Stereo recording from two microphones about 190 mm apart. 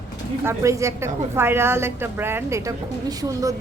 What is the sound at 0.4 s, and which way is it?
A woman's voice, 15° right (ahead or behind).